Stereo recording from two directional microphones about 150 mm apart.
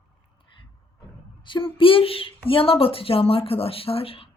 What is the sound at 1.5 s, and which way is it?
Speech, 35° left (ahead or behind).